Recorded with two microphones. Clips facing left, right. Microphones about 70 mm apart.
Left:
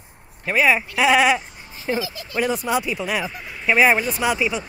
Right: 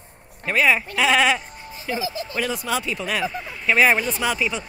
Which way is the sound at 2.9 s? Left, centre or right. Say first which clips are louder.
Even; centre.